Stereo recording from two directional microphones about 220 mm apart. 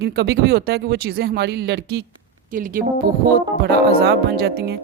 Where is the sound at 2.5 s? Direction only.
40° right (ahead or behind).